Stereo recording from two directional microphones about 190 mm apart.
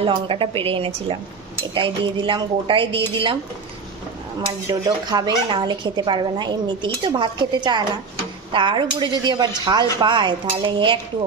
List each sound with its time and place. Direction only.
0.0 s speech: 30° right (ahead or behind)
4.6 s speech: 20° right (ahead or behind)